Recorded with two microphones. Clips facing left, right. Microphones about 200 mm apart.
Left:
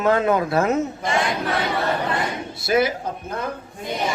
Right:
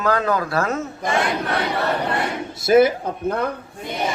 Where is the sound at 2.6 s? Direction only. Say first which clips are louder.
Right 6 dB; 50° right (ahead or behind).